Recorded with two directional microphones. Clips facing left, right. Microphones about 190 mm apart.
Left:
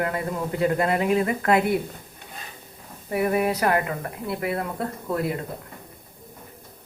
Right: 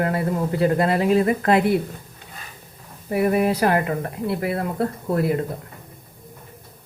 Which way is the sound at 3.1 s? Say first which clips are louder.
Right 3 dB; 25° right (ahead or behind).